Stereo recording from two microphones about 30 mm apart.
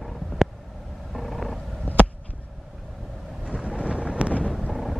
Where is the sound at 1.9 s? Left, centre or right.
Left.